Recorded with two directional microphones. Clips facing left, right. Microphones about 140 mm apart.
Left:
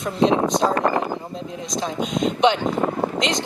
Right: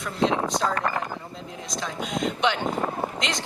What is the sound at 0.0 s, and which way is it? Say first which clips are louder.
Speech: left 6 dB; 20° left (ahead or behind).